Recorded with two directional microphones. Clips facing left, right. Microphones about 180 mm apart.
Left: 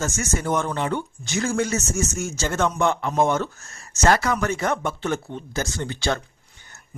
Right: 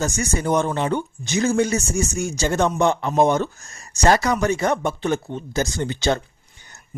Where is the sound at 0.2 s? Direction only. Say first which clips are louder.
Right 4 dB; 15° right (ahead or behind).